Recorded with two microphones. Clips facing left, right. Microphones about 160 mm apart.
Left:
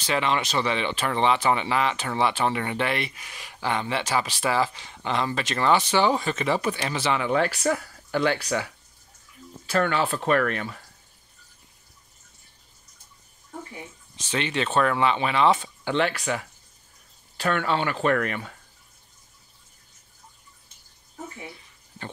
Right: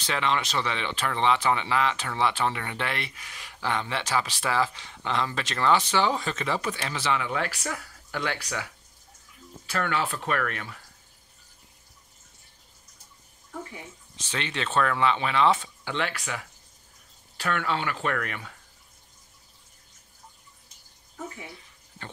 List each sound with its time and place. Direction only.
0.0 s speech: 10° left (ahead or behind); by 8.5 s 35° left (ahead or behind)
9.7 s speech: 35° left (ahead or behind)
14.3 s speech: 15° left (ahead or behind)
15.8 s speech: 30° left (ahead or behind)